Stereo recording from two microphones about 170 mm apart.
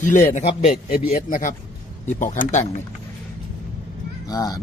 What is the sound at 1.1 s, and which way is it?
Speech, 50° left (ahead or behind).